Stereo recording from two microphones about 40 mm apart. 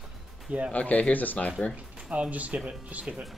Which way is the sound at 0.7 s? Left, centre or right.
Left.